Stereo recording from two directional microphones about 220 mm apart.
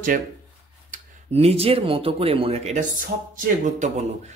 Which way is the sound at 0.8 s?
25° right (ahead or behind).